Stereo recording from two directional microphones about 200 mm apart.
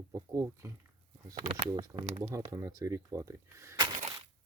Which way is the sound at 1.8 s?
20° right (ahead or behind).